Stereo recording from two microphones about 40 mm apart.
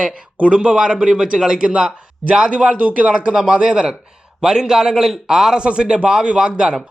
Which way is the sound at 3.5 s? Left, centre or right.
Right.